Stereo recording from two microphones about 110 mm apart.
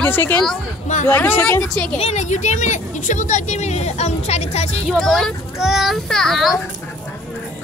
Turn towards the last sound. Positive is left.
turn(degrees=0)  # may be behind; listen again after turning